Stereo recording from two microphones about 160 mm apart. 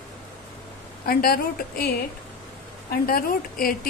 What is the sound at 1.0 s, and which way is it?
A woman's voice, 70° left (ahead or behind).